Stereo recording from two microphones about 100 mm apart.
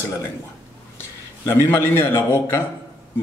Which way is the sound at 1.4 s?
30° left (ahead or behind).